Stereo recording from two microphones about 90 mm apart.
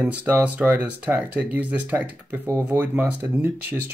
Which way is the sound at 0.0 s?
15° right (ahead or behind).